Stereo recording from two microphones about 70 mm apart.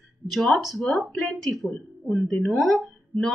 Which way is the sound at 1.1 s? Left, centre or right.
Centre.